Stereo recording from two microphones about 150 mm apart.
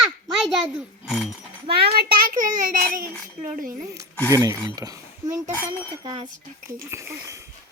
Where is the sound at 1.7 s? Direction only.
90° right.